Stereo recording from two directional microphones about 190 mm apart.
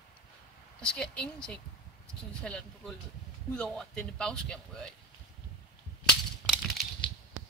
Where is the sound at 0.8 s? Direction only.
5° left (ahead or behind).